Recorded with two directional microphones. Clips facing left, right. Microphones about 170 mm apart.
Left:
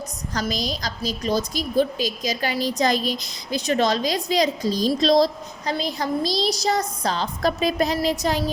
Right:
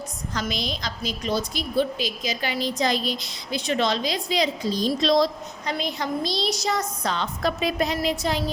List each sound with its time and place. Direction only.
0.3 s a woman's voice: 40° left (ahead or behind)